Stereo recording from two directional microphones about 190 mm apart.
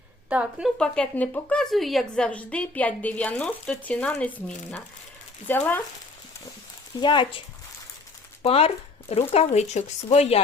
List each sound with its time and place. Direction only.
0.3 s a woman's voice: 5° right (ahead or behind)
0.8 s a woman's voice: 5° left (ahead or behind)
7.0 s speech: 25° left (ahead or behind)